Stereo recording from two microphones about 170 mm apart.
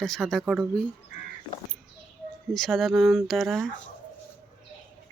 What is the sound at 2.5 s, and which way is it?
Speech, centre (ahead or behind).